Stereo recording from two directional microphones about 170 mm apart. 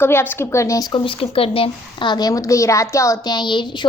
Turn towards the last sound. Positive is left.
turn(degrees=25)  # may be behind; listen again after turning